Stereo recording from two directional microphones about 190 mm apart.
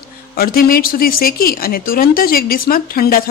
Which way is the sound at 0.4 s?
50° left (ahead or behind).